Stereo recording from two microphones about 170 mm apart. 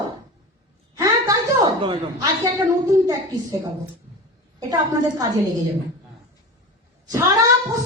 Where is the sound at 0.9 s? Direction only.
20° right (ahead or behind).